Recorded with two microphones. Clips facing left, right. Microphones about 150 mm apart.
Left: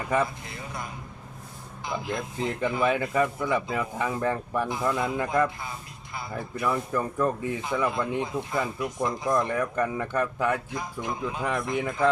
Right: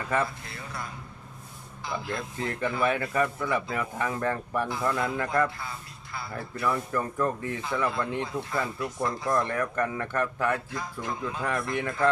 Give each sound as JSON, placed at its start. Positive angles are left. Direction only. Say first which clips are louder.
{"t": 0.0, "sound": "speech", "louder": "left 2 dB", "side_deg": 15}